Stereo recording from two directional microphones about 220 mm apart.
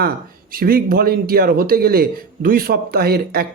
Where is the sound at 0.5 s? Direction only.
40° right (ahead or behind).